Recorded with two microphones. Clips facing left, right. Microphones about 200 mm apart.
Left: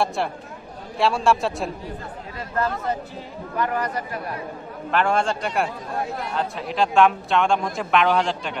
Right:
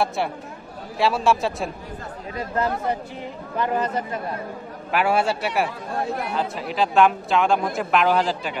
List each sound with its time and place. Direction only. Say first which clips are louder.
0.9 s a man's voice: even; centre (ahead or behind)
2.5 s a man's voice: right 1 dB; 15° right (ahead or behind)
4.9 s a man's voice: right 1 dB; 5° right (ahead or behind)